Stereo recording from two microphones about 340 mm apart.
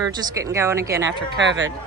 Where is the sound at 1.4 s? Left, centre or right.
Right.